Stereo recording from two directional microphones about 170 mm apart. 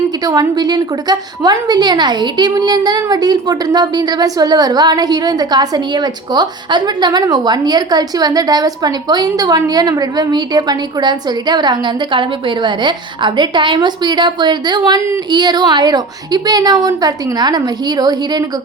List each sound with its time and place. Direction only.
0.3 s a woman's voice: 20° right (ahead or behind)